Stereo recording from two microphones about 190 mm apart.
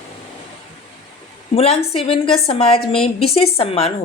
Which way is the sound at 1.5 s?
30° left (ahead or behind).